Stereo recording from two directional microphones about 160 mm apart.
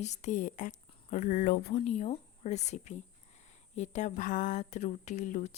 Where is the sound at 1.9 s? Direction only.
45° left (ahead or behind).